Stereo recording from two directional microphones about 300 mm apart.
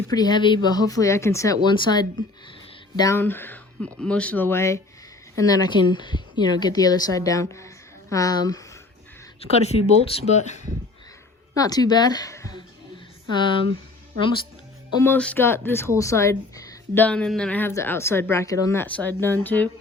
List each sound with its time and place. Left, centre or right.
0.1 s speech: centre
11.5 s speech: centre
14.9 s speech: centre